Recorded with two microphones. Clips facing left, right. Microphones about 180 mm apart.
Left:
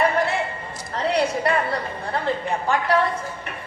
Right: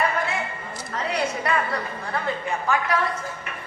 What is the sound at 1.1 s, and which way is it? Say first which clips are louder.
A woman's voice: left 4 dB; 35° left (ahead or behind).